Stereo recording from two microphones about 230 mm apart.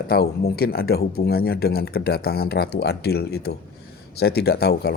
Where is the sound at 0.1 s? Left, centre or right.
Left.